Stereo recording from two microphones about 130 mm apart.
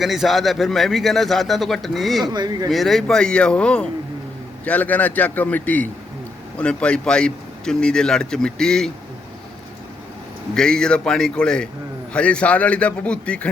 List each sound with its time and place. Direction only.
0.0 s speech: centre (ahead or behind)
2.2 s speech: 35° right (ahead or behind)
2.6 s a man's voice: centre (ahead or behind)
10.5 s a man's voice: 5° left (ahead or behind)